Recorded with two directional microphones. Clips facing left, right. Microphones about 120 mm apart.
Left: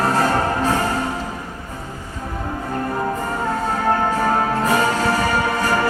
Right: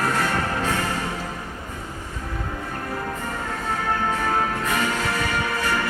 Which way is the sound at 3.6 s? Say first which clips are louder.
Left 5 dB; 40° left (ahead or behind).